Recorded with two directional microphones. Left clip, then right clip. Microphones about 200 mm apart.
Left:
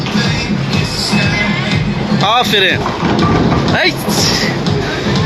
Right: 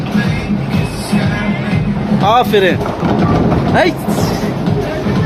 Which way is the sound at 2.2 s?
5° right (ahead or behind).